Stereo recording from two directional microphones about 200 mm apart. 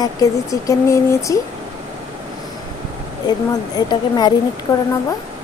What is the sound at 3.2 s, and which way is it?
A woman's voice, 20° left (ahead or behind).